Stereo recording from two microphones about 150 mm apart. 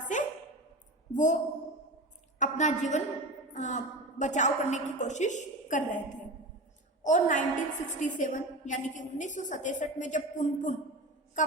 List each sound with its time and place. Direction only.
0.0 s a sound: 55° left (ahead or behind)
1.1 s a woman's voice: 55° left (ahead or behind)
2.4 s a woman's voice: 55° left (ahead or behind)
7.0 s a woman's voice: 60° left (ahead or behind)